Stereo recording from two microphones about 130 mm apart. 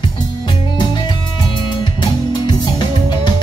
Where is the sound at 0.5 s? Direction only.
35° left (ahead or behind).